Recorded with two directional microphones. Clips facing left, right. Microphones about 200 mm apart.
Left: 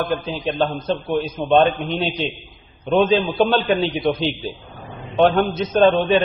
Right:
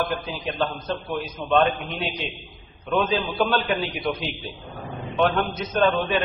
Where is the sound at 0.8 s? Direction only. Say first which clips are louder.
Left 7 dB; 30° left (ahead or behind).